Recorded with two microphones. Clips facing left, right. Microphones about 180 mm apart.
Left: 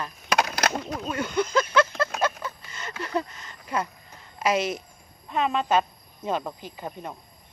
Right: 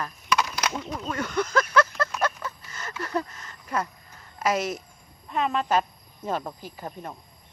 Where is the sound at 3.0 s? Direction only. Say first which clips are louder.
Left 1 dB; 25° left (ahead or behind).